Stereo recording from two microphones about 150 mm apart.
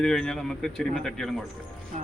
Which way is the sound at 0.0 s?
5° left (ahead or behind).